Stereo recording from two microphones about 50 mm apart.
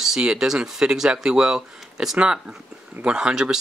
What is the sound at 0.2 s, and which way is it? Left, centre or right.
Speech, centre.